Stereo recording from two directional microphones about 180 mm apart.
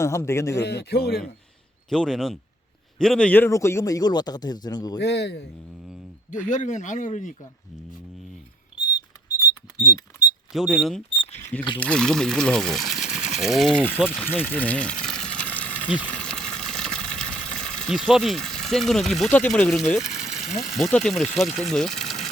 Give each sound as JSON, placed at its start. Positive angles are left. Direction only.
{"t": 0.0, "sound": "speech", "side_deg": 15}
{"t": 0.5, "sound": "a man's voice", "side_deg": 65}
{"t": 1.9, "sound": "a man's voice", "side_deg": 0}
{"t": 4.9, "sound": "a man's voice", "side_deg": 70}
{"t": 5.9, "sound": "a sound", "side_deg": -5}
{"t": 6.5, "sound": "speech", "side_deg": 40}
{"t": 10.5, "sound": "speech", "side_deg": 0}
{"t": 11.2, "sound": "camera", "side_deg": 40}
{"t": 11.8, "sound": "speech", "side_deg": 5}
{"t": 14.1, "sound": "water", "side_deg": 10}
{"t": 17.2, "sound": "speech", "side_deg": 5}